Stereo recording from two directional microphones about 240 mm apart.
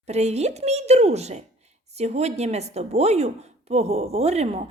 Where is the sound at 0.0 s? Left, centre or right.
Right.